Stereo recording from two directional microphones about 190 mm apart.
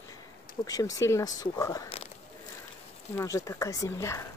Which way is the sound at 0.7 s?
20° left (ahead or behind).